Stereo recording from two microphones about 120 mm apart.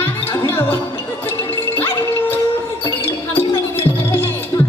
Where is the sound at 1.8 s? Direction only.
15° left (ahead or behind).